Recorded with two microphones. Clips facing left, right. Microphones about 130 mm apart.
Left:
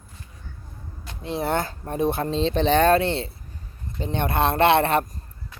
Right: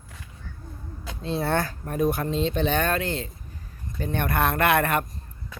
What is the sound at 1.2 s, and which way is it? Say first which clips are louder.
Speech: even; 20° left (ahead or behind).